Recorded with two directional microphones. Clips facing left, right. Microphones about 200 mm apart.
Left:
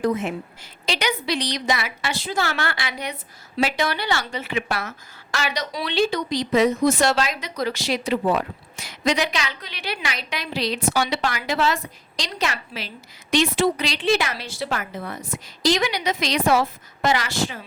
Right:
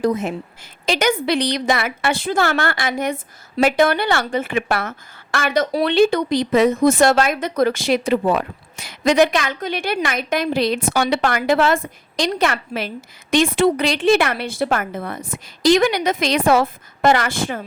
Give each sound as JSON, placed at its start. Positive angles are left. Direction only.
{"t": 0.0, "sound": "speech", "side_deg": -40}